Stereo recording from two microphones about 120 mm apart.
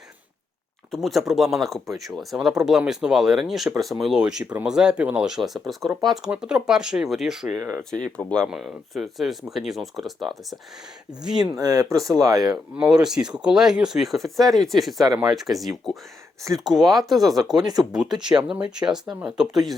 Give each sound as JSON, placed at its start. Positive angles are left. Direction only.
{"t": 0.9, "sound": "speech", "side_deg": 0}
{"t": 7.5, "sound": "speech", "side_deg": -20}
{"t": 8.0, "sound": "speech", "side_deg": 5}
{"t": 11.5, "sound": "speech", "side_deg": -30}
{"t": 12.7, "sound": "speech", "side_deg": -5}
{"t": 17.6, "sound": "speech", "side_deg": -35}
{"t": 18.3, "sound": "speech", "side_deg": -5}